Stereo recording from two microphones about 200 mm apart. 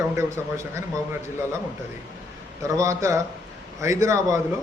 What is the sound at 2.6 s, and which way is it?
A man's voice, 15° right (ahead or behind).